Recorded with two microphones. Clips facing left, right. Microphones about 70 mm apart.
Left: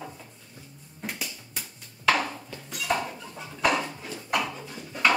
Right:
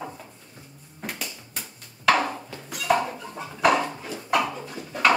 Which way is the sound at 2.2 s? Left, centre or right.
Right.